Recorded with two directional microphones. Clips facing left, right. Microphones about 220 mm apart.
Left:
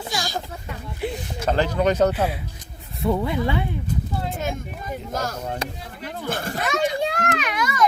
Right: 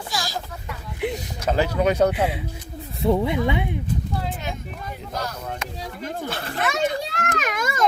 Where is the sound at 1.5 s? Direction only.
10° right (ahead or behind).